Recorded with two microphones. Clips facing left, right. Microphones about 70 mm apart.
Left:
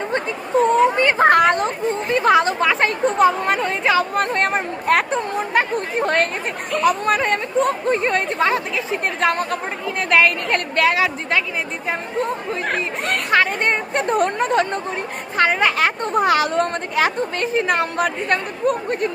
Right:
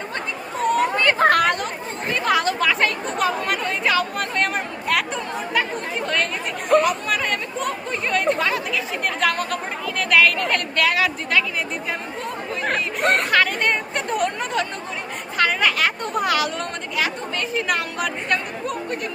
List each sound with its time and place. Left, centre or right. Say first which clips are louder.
0.9 s speech: left 3 dB; left
13.0 s speech: right 4 dB; right
13.3 s speech: left 2 dB; left